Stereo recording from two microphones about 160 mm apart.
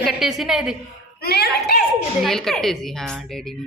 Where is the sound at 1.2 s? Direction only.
85° left.